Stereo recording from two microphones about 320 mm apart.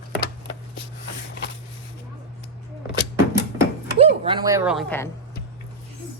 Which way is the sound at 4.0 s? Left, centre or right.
Centre.